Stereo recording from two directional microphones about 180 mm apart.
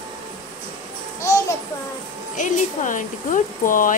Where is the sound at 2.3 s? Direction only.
45° left (ahead or behind).